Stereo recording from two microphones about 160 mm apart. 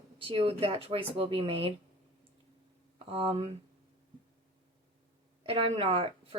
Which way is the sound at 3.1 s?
35° right (ahead or behind).